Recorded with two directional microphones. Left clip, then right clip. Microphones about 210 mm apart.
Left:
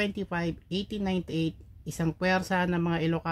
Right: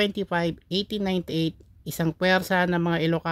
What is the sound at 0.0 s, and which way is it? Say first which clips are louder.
Speech: right 6 dB; 40° right (ahead or behind).